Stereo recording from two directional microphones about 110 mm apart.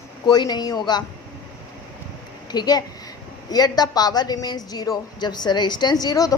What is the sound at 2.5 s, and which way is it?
A woman's voice, 35° left (ahead or behind).